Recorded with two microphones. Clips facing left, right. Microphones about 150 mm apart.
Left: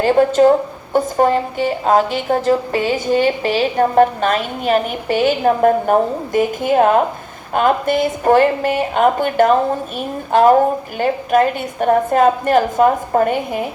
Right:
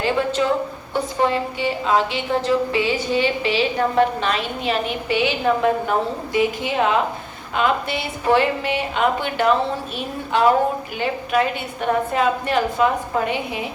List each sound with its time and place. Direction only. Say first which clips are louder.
0.0 s a woman's voice: left 9 dB; 45° left (ahead or behind)